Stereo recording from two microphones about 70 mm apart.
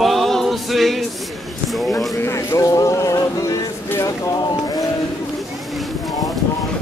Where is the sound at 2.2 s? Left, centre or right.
Left.